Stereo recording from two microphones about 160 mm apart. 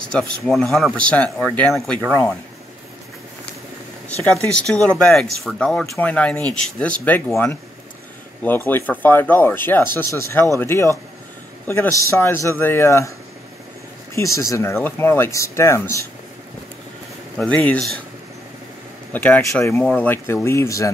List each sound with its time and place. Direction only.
0.1 s speech: 5° left (ahead or behind)
4.1 s speech: 5° left (ahead or behind)
14.1 s speech: 20° left (ahead or behind)
17.4 s speech: 5° left (ahead or behind)
19.1 s speech: 10° left (ahead or behind)